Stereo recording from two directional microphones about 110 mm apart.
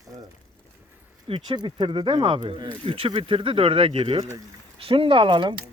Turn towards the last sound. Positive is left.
turn(degrees=-50)  # may be behind; listen again after turning